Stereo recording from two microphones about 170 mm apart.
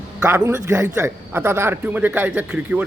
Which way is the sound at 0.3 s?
10° right (ahead or behind).